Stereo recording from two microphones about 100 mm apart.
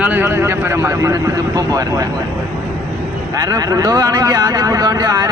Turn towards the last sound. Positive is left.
turn(degrees=-35)  # may be behind; listen again after turning